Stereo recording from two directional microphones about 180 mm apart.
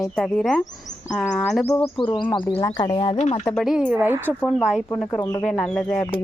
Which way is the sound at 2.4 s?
10° left (ahead or behind).